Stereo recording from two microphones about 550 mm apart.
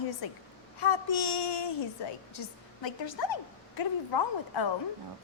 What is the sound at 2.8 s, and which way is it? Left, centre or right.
A woman's voice, left.